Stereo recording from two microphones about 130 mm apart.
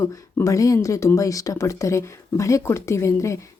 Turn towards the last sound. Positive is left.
turn(degrees=25)  # may be behind; listen again after turning